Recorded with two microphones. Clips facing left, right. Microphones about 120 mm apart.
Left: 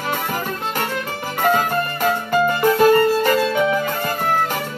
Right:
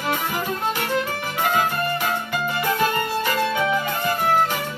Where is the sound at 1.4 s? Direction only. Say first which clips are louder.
Left 4 dB; 40° left (ahead or behind).